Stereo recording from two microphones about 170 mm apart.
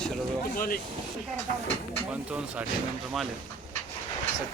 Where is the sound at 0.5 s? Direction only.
55° left (ahead or behind).